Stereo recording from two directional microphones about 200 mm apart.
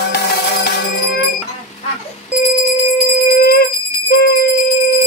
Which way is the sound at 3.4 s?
50° left (ahead or behind).